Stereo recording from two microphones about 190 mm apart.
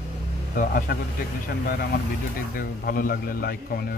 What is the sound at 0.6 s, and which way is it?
Speech, 45° left (ahead or behind).